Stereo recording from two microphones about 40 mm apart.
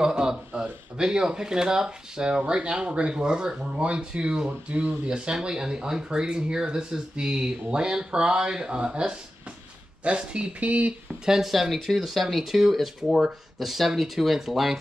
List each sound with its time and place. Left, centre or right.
0.0 s speech: centre; by 11.0 s right
11.2 s speech: centre
11.5 s speech: centre